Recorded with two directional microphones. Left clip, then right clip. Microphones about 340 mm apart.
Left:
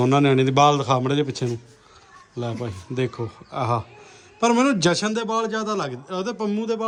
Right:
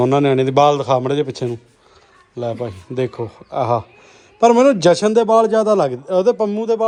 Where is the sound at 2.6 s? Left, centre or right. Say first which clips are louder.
Right 5 dB; centre.